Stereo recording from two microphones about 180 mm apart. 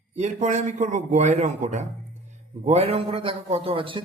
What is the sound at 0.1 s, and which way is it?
A man's voice, 40° right (ahead or behind).